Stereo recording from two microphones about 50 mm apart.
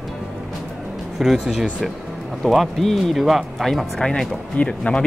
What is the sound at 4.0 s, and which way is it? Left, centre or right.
Speech, centre.